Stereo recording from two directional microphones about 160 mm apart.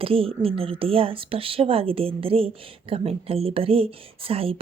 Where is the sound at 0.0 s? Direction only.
35° right (ahead or behind).